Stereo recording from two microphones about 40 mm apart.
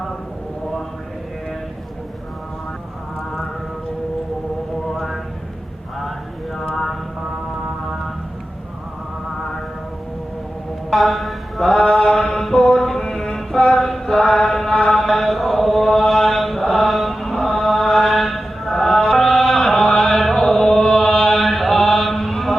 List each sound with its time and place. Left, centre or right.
4.9 s a sound: centre
10.9 s mantra: centre
14.2 s mantra: centre
14.4 s mantra: centre
14.7 s mantra: centre
14.9 s chant: centre
17.6 s mantra: centre
20.0 s chant: centre